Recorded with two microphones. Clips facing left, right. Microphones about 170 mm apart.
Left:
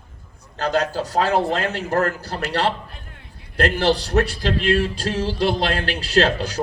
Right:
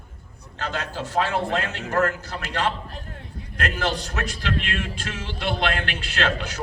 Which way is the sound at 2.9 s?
40° right (ahead or behind).